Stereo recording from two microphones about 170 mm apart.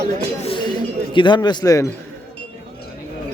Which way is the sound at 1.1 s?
25° left (ahead or behind).